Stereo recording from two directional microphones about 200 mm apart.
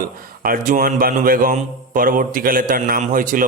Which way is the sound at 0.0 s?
45° right (ahead or behind).